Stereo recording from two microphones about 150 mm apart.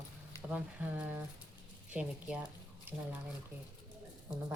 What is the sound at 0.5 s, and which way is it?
Speech, 10° right (ahead or behind).